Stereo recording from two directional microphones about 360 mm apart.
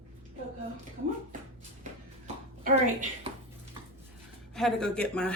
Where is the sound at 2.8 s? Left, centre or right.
Right.